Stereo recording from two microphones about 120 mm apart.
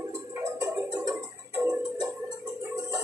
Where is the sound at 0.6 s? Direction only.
25° right (ahead or behind).